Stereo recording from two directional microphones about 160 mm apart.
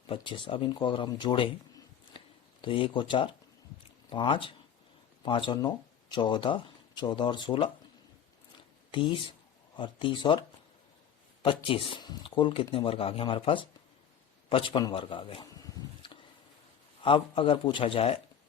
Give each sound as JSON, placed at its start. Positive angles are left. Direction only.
{"t": 0.1, "sound": "speech", "side_deg": 35}
{"t": 8.9, "sound": "speech", "side_deg": 30}
{"t": 11.4, "sound": "speech", "side_deg": 35}
{"t": 14.5, "sound": "a sound", "side_deg": 30}
{"t": 17.0, "sound": "speech", "side_deg": 35}